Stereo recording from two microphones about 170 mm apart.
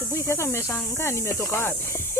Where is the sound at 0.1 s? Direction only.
15° left (ahead or behind).